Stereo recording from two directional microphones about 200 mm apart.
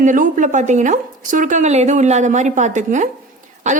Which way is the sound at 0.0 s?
40° right (ahead or behind).